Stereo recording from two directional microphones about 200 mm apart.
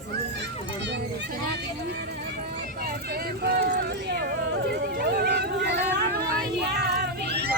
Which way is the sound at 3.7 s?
55° right (ahead or behind).